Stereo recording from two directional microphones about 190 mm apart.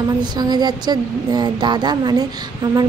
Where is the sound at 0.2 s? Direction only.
20° right (ahead or behind).